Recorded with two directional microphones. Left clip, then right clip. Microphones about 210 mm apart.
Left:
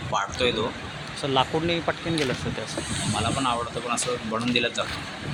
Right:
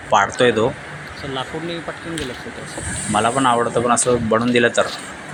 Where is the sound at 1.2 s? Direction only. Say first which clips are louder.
Left 3 dB; centre (ahead or behind).